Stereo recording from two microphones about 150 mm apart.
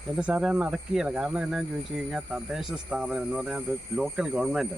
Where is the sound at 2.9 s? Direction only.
5° right (ahead or behind).